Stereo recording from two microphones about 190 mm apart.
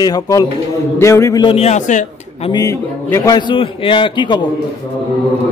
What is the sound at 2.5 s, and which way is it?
A man's voice, 15° left (ahead or behind).